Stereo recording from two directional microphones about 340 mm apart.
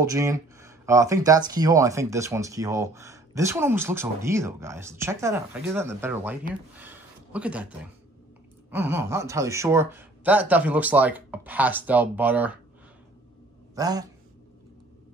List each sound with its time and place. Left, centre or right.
0.0 s speech: centre
6.8 s a sound: centre
8.6 s speech: centre
13.7 s speech: centre